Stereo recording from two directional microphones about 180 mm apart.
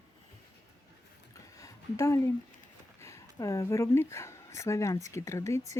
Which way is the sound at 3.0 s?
15° left (ahead or behind).